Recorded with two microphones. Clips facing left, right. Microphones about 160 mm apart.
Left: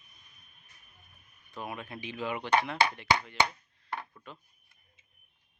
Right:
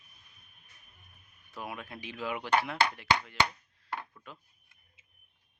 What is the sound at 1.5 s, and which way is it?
Speech, centre (ahead or behind).